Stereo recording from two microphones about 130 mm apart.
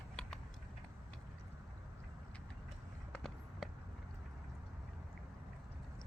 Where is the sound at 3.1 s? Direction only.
5° left (ahead or behind).